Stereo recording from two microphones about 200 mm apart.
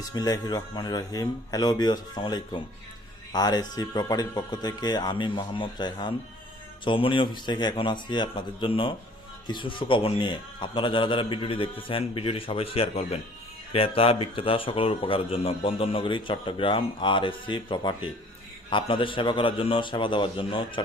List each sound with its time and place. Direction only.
0.0 s speech: 20° left (ahead or behind)